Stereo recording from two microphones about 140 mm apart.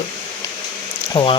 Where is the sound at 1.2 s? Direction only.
40° left (ahead or behind).